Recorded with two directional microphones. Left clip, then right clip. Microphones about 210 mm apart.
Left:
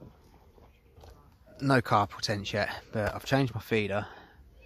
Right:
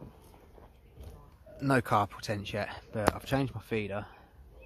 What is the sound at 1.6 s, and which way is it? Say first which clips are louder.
Speech: left 2 dB; 20° left (ahead or behind).